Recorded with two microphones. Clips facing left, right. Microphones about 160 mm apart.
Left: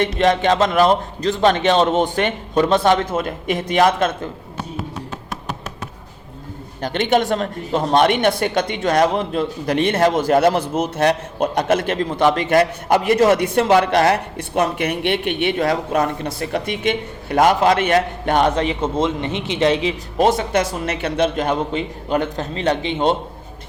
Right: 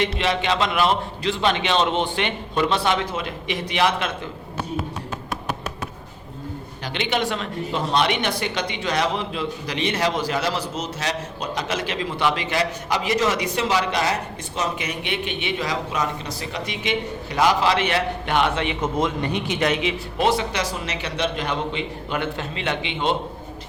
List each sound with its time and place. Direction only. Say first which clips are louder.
0.0 s speech: left 6 dB; 45° left (ahead or behind)
6.8 s speech: left 7 dB; 50° left (ahead or behind)